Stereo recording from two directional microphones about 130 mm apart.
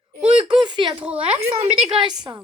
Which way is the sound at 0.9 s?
10° right (ahead or behind).